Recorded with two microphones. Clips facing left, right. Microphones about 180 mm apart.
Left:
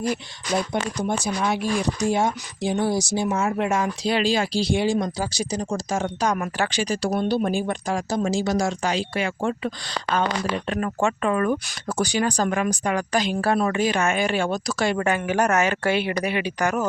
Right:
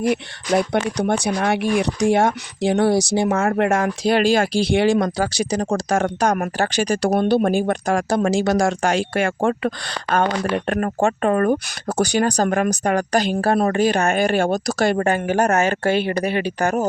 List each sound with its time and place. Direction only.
0.0 s speech: 65° right (ahead or behind)
6.2 s speech: 50° right (ahead or behind)
11.9 s speech: 65° right (ahead or behind)
12.2 s speech: 45° right (ahead or behind)
16.1 s speech: 30° right (ahead or behind)